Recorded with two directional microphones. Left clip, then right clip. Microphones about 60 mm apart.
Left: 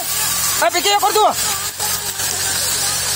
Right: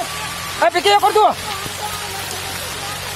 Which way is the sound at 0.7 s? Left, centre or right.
Left.